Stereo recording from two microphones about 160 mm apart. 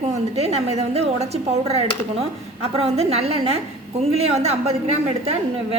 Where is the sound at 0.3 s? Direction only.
40° right (ahead or behind).